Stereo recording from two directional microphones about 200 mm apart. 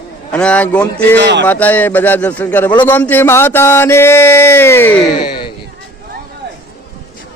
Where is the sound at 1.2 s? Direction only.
60° right (ahead or behind).